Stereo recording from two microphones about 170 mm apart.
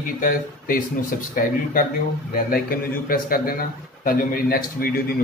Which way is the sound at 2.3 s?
60° left (ahead or behind).